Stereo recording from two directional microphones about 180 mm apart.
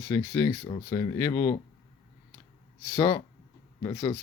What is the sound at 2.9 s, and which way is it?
Speech, 20° left (ahead or behind).